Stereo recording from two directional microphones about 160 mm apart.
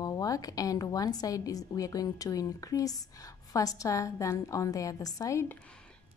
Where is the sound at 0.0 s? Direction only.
20° left (ahead or behind).